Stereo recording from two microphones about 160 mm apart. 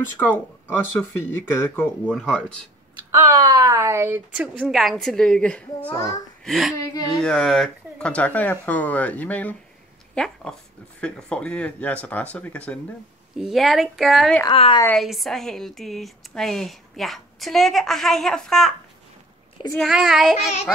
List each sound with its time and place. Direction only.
0.2 s speech: 10° left (ahead or behind)
3.2 s a woman's voice: 25° right (ahead or behind); by 6.7 s centre (ahead or behind)
6.8 s whimper: 25° left (ahead or behind)
7.2 s speech: 5° left (ahead or behind)
14.5 s a woman's voice: 35° left (ahead or behind)
15.0 s speech: centre (ahead or behind)
19.8 s speech: centre (ahead or behind)